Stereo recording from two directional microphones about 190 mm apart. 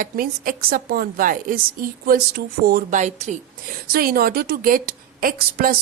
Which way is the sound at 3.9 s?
50° right (ahead or behind).